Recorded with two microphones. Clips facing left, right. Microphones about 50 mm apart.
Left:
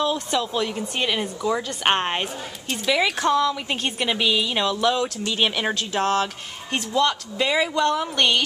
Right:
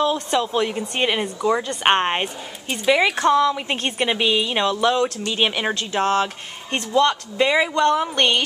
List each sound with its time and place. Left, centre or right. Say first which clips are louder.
0.0 s speech: right 3 dB; centre
0.5 s a woman's voice: right 3 dB; centre